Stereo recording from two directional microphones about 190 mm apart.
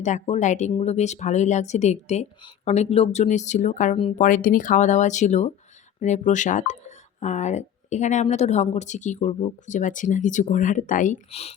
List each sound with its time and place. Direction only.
0.0 s speech: 40° left (ahead or behind)